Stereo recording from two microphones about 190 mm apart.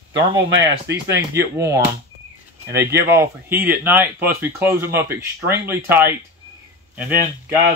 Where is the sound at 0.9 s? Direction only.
15° right (ahead or behind).